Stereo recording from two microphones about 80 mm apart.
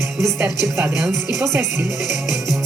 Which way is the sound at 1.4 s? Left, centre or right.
Right.